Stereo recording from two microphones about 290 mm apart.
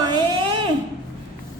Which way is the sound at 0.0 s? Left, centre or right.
Centre.